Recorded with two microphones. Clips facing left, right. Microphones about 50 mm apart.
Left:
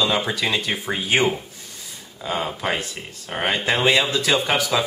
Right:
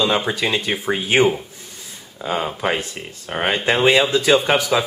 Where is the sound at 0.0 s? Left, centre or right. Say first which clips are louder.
Right 2 dB; centre.